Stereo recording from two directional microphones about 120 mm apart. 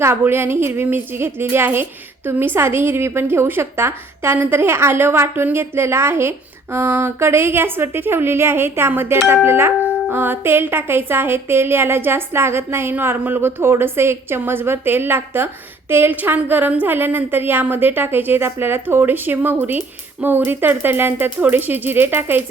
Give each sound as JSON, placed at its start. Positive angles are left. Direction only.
{"t": 0.0, "sound": "a woman's voice", "side_deg": -20}